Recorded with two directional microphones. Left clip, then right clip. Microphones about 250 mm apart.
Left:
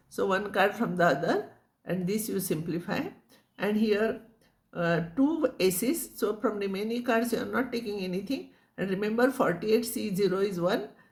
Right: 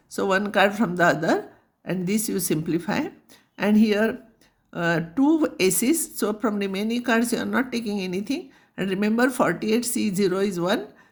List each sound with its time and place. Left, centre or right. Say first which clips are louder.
0.1 s speech: right 6 dB; right